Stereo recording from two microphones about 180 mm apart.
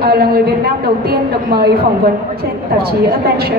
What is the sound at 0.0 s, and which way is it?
A man's voice, 60° right (ahead or behind).